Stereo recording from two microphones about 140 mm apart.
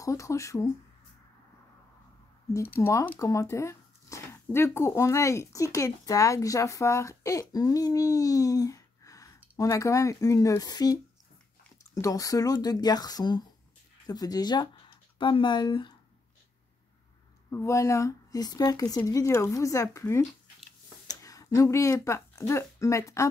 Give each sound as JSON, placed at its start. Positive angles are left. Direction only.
{"t": 0.0, "sound": "speech", "side_deg": 20}
{"t": 2.5, "sound": "speech", "side_deg": 15}
{"t": 17.5, "sound": "speech", "side_deg": 20}